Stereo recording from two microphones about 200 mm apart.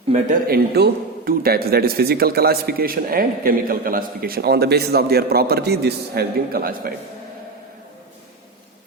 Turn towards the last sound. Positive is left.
turn(degrees=-50)  # may be behind; listen again after turning